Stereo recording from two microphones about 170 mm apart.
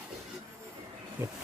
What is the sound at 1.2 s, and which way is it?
Speech, 15° right (ahead or behind).